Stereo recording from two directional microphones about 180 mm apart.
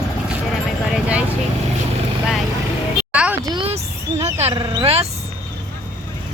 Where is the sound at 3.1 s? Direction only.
5° right (ahead or behind).